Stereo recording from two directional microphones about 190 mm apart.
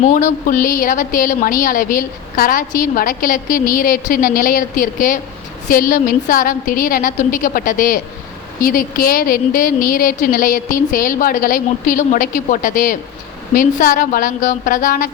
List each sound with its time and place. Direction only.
0.0 s a woman's voice: 40° left (ahead or behind)